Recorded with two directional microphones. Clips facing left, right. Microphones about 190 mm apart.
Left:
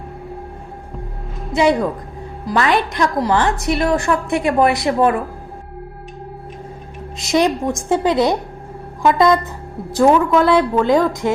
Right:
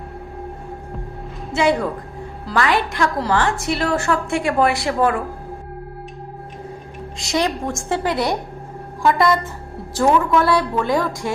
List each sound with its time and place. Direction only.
1.5 s a woman's voice: 20° left (ahead or behind)
7.2 s a woman's voice: 20° left (ahead or behind)